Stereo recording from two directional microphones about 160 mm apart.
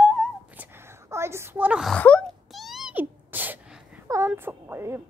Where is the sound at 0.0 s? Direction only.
10° right (ahead or behind).